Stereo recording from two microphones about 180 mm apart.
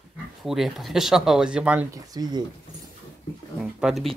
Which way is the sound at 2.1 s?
20° right (ahead or behind).